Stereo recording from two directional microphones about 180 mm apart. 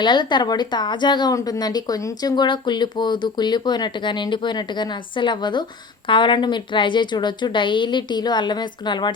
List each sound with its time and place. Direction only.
0.0 s speech: 25° left (ahead or behind)